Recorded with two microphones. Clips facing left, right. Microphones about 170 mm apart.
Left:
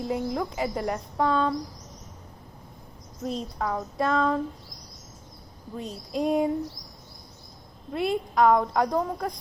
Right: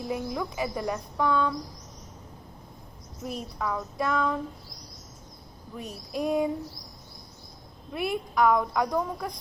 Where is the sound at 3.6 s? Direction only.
40° left (ahead or behind).